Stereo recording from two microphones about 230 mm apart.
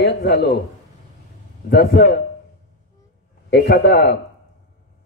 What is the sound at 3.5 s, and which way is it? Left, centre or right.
Speech, left.